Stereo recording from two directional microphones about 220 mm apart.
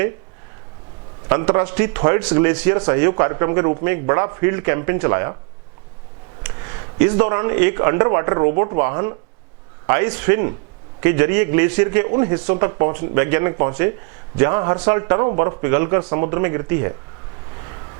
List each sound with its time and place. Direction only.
1.3 s a man's voice: 15° right (ahead or behind)
7.0 s a man's voice: 15° right (ahead or behind)